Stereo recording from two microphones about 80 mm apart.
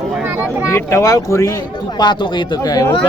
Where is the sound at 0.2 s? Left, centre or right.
Right.